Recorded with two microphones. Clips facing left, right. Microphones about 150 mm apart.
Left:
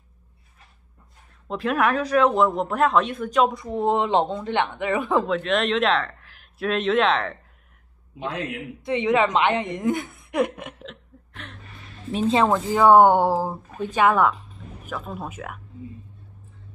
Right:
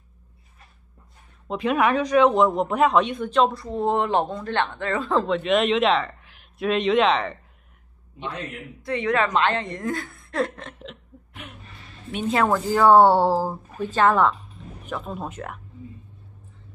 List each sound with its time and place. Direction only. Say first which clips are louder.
1.5 s speech: right 1 dB; centre (ahead or behind)
3.5 s a woman's voice: left 1 dB; 15° left (ahead or behind)
5.2 s speech: right 2 dB; centre (ahead or behind)
8.8 s a woman's voice: left 2 dB; 20° left (ahead or behind)
10.7 s hiccup: even; centre (ahead or behind)
12.1 s speech: left 2 dB; 30° left (ahead or behind); by 15.6 s 5° left (ahead or behind)